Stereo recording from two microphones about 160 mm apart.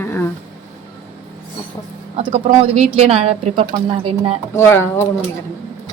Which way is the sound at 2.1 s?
35° right (ahead or behind).